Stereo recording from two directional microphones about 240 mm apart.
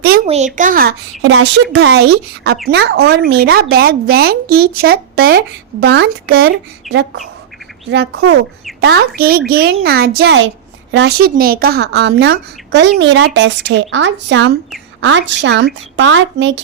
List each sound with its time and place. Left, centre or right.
0.3 s speech: right
1.2 s a woman's voice: right
6.8 s speech: centre
7.9 s a woman's voice: right